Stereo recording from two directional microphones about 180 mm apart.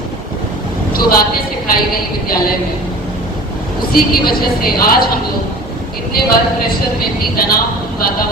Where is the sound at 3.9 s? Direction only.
55° left (ahead or behind).